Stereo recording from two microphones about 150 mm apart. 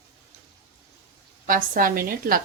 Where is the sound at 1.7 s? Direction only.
70° right (ahead or behind).